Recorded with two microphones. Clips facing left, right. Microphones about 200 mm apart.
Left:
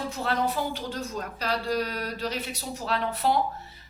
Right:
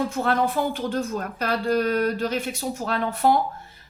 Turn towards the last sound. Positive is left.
turn(degrees=-50)  # may be behind; listen again after turning